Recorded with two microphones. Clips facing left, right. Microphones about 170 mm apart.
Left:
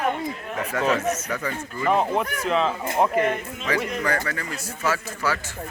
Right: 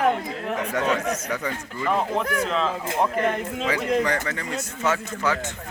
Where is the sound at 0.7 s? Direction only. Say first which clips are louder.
Left 2 dB; 5° left (ahead or behind).